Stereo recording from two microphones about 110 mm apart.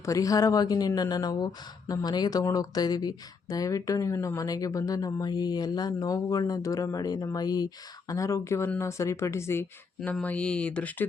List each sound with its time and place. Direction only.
0.0 s speech: 30° left (ahead or behind)
10.0 s speech: 10° left (ahead or behind)